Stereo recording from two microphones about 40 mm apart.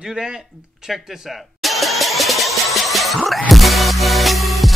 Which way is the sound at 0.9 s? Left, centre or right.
Centre.